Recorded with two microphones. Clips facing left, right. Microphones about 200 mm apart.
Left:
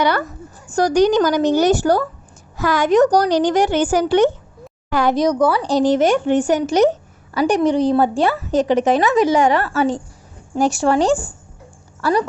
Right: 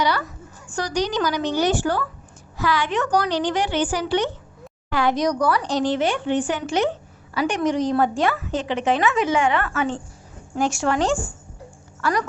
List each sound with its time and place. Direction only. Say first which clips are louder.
0.0 s a woman's voice: left 4 dB; 55° left (ahead or behind)
5.2 s a woman's voice: left 5 dB; 25° left (ahead or behind)